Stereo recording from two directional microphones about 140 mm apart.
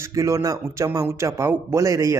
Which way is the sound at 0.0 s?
20° right (ahead or behind).